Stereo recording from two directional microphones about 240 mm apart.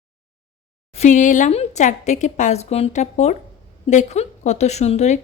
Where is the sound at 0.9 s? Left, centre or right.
Left.